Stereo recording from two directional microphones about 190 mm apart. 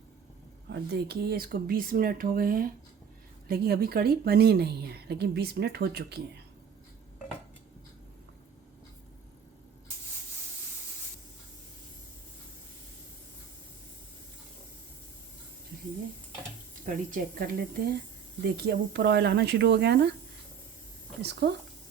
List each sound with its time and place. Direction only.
0.7 s a woman's voice: 60° right (ahead or behind)
16.8 s a woman's voice: 45° right (ahead or behind); by 20.1 s 60° right (ahead or behind)
21.2 s a woman's voice: 60° right (ahead or behind)